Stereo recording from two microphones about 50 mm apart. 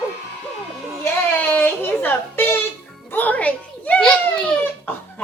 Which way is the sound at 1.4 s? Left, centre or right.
Left.